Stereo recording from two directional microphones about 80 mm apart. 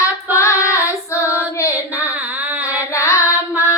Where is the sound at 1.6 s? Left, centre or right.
Left.